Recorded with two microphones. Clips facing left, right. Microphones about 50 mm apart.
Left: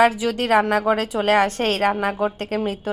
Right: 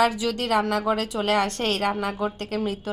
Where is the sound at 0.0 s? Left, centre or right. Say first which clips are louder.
Left 5 dB; left.